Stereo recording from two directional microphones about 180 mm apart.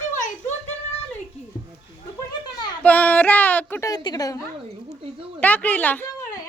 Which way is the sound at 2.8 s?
10° left (ahead or behind).